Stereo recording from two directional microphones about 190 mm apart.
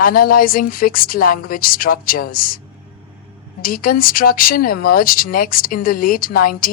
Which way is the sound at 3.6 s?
50° left (ahead or behind).